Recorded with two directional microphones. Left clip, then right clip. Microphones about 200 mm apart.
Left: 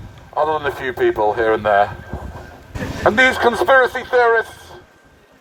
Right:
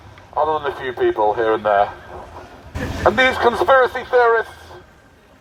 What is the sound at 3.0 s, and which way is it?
A man's voice, 20° left (ahead or behind).